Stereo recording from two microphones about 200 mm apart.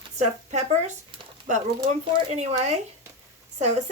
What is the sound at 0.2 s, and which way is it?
Speech, 35° right (ahead or behind).